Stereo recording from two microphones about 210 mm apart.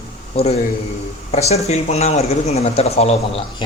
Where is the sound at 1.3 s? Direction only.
30° left (ahead or behind).